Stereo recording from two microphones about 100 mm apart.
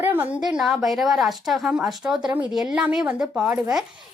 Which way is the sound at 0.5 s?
5° right (ahead or behind).